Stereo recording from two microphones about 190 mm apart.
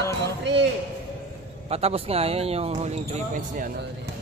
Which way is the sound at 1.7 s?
35° right (ahead or behind).